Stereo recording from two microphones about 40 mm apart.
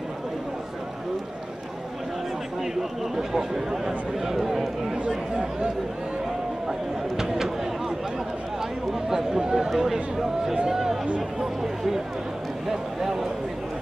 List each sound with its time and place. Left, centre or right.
2.6 s speech: centre
4.9 s speech: right
7.2 s speech: centre
8.9 s speech: centre
10.5 s speech: centre
11.1 s speech: centre